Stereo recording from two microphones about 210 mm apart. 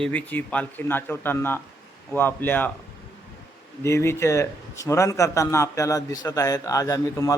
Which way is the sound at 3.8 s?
15° left (ahead or behind).